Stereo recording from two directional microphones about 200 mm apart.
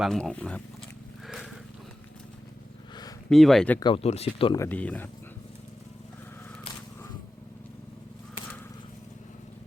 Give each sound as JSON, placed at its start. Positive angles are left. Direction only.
{"t": 0.0, "sound": "speech", "side_deg": 5}
{"t": 3.2, "sound": "speech", "side_deg": 0}
{"t": 3.8, "sound": "speech", "side_deg": 25}
{"t": 4.5, "sound": "speech", "side_deg": 10}